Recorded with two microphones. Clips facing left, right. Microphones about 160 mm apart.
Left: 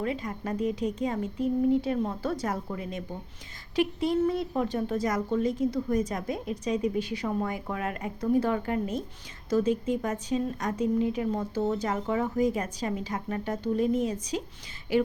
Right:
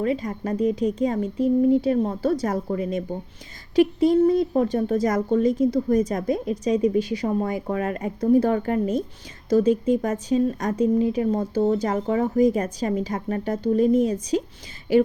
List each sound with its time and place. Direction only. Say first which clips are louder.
0.0 s speech: right 7 dB; 35° right (ahead or behind)